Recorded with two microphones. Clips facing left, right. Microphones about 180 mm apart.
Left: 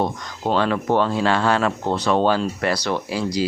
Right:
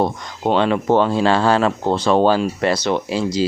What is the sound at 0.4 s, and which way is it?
Speech, 20° right (ahead or behind).